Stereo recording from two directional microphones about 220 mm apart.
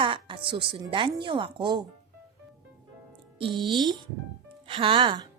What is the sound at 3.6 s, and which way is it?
A woman's voice, 20° right (ahead or behind).